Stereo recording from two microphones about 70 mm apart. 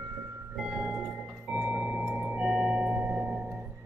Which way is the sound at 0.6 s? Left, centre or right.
Centre.